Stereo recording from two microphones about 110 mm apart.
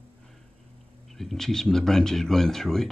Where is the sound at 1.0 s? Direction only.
Centre (ahead or behind).